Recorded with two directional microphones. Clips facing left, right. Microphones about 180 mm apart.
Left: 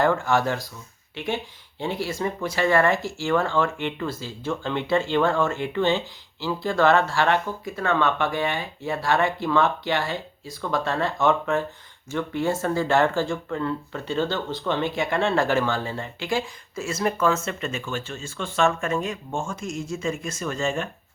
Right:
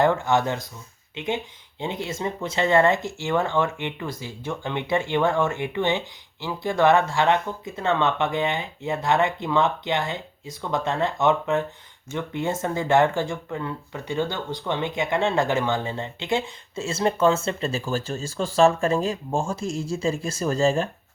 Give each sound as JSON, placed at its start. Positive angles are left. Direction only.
{"t": 0.0, "sound": "speech", "side_deg": -20}